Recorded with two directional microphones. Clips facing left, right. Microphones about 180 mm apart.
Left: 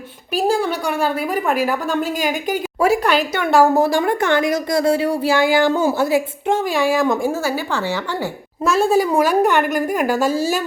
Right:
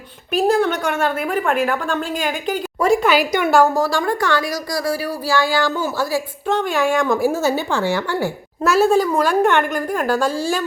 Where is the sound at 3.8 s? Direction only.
20° left (ahead or behind).